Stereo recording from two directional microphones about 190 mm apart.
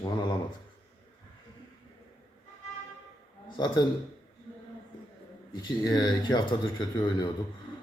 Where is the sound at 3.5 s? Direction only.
20° left (ahead or behind).